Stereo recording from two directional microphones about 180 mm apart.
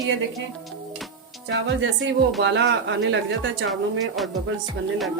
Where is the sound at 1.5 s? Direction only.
90° right.